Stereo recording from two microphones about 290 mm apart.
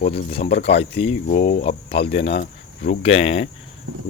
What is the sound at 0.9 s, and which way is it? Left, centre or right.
Speech, left.